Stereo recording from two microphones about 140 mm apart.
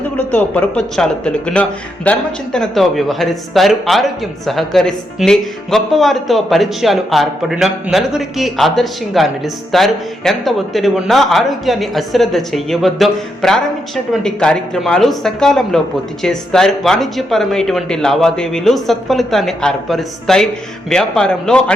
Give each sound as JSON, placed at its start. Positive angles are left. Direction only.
{"t": 0.2, "sound": "speech", "side_deg": 10}